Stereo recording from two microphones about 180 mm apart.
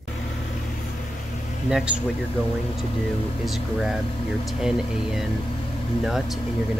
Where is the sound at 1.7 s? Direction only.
5° right (ahead or behind).